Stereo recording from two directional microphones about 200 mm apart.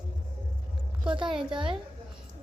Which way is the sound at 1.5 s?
25° right (ahead or behind).